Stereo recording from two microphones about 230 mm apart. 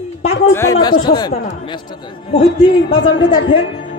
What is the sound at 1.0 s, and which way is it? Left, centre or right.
Speech, centre.